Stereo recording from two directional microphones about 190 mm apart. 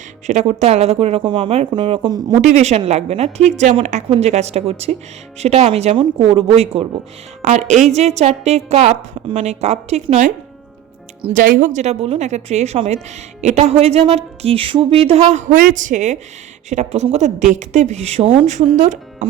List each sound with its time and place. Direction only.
0.3 s a woman's voice: 35° right (ahead or behind)
2.4 s a woman's voice: 35° right (ahead or behind)
11.3 s a woman's voice: 45° right (ahead or behind)